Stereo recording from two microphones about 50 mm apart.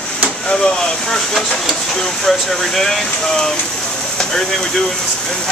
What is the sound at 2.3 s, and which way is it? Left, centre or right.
Speech, centre.